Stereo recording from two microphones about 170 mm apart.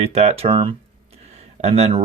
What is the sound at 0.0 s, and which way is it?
Speech, 40° right (ahead or behind).